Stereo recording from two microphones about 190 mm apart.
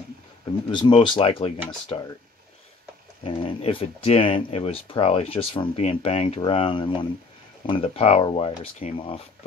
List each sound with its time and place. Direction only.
0.7 s speech: 25° left (ahead or behind)
3.3 s speech: 25° left (ahead or behind)